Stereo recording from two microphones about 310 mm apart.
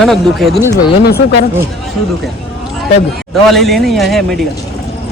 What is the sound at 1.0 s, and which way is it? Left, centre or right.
Speech, left.